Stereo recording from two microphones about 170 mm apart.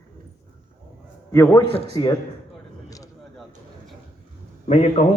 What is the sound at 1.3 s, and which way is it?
Speech, 15° left (ahead or behind).